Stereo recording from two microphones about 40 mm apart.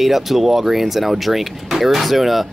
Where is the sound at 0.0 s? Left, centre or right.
Centre.